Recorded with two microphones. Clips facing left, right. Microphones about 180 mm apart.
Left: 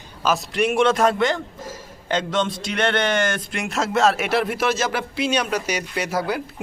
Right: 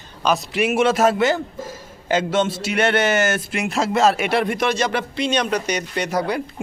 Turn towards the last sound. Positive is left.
turn(degrees=5)  # may be behind; listen again after turning